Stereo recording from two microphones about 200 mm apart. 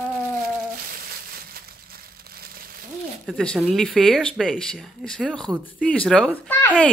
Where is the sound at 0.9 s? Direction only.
45° right (ahead or behind).